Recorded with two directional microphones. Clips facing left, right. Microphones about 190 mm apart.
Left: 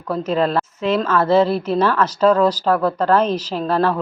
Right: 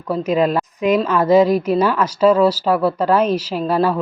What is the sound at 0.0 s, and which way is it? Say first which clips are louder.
Speech: right 2 dB; 10° right (ahead or behind).